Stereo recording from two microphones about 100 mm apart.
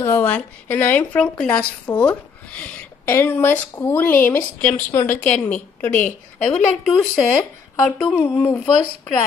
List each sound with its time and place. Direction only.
0.0 s a woman's voice: 25° left (ahead or behind)
6.4 s a woman's voice: 5° left (ahead or behind)
8.2 s a woman's voice: 20° left (ahead or behind)